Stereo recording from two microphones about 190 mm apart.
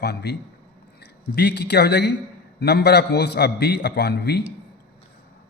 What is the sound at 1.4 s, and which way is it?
A man's voice, 60° left (ahead or behind).